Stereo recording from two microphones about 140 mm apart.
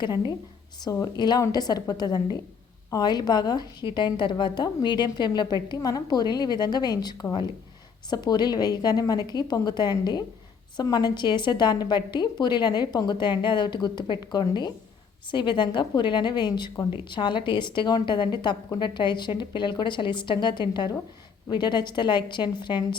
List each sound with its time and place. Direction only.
0.0 s a woman's voice: 30° left (ahead or behind)